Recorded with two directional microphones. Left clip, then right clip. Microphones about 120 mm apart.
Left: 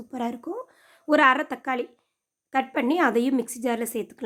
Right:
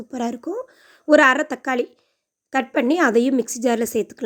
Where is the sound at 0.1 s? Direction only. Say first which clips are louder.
Right 4 dB; 30° right (ahead or behind).